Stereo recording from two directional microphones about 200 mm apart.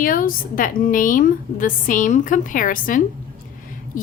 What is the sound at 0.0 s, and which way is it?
A woman's voice, 45° left (ahead or behind).